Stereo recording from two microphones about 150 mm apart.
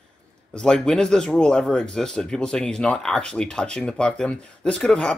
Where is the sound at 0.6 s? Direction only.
5° left (ahead or behind).